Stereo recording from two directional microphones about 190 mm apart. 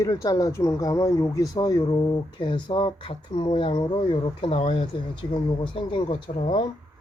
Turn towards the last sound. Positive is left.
turn(degrees=30)  # may be behind; listen again after turning